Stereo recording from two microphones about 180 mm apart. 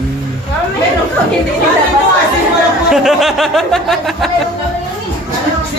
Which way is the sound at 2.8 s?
Centre (ahead or behind).